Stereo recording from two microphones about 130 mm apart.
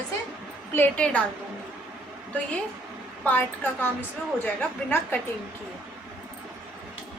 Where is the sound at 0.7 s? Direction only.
10° left (ahead or behind).